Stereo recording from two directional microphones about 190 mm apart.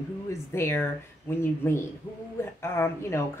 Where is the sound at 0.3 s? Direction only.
15° left (ahead or behind).